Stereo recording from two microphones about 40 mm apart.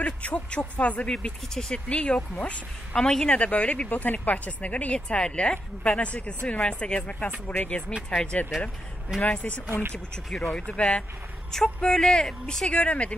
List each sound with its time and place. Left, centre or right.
0.0 s speech: left
1.0 s a woman's voice: centre
1.9 s speech: left
2.9 s speech: centre
3.3 s speech: left
3.9 s speech: left
4.9 s a woman's voice: left
8.3 s a woman's voice: left
9.2 s speech: left
10.3 s speech: centre
10.7 s a woman's voice: left
12.6 s speech: left